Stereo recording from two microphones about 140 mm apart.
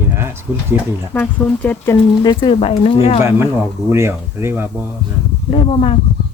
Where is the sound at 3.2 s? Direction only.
15° right (ahead or behind).